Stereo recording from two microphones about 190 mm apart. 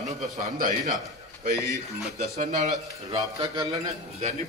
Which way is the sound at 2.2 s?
40° right (ahead or behind).